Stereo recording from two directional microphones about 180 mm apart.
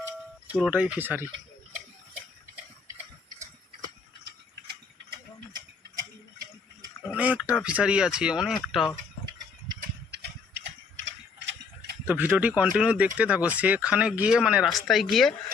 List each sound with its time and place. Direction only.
0.5 s speech: 5° right (ahead or behind)
7.0 s a sound: 10° right (ahead or behind)
7.6 s speech: 5° right (ahead or behind)
10.1 s clip-clop: 70° right (ahead or behind)
11.0 s mechanisms: 75° right (ahead or behind)
12.0 s speech: 10° right (ahead or behind)